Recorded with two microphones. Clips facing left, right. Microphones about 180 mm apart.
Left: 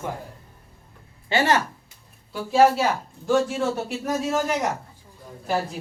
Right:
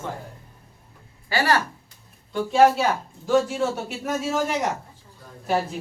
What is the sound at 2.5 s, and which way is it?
A man's voice, 5° left (ahead or behind).